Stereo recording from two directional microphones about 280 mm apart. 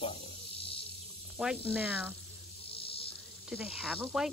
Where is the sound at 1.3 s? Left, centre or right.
Centre.